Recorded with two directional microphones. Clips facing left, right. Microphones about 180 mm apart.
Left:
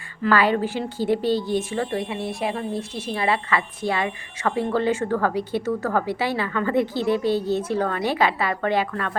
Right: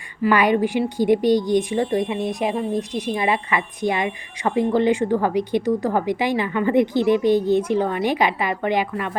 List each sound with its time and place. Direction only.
0.2 s a woman's voice: 15° right (ahead or behind)